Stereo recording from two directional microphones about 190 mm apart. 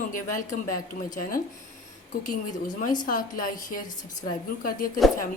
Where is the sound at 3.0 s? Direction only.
45° left (ahead or behind).